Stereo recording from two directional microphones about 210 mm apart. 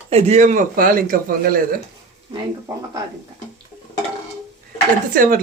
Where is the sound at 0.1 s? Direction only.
30° right (ahead or behind).